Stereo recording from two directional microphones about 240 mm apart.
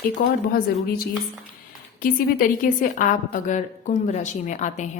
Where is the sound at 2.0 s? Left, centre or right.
Left.